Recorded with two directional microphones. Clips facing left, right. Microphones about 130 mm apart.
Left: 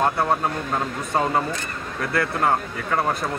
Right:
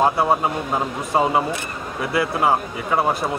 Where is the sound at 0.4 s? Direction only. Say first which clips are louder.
Right 2 dB; 15° right (ahead or behind).